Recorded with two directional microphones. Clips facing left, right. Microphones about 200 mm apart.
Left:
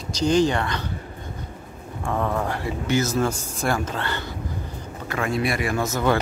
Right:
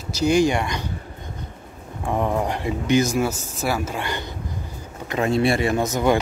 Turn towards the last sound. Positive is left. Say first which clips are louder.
# right 3 dB
turn(degrees=-15)  # may be behind; listen again after turning